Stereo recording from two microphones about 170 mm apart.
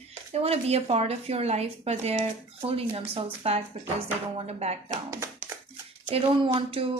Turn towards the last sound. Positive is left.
turn(degrees=-35)  # may be behind; listen again after turning